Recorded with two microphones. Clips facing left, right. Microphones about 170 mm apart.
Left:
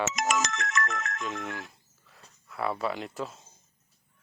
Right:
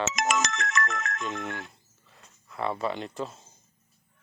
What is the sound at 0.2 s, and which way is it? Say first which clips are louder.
Ringtone: right 1 dB; 80° right.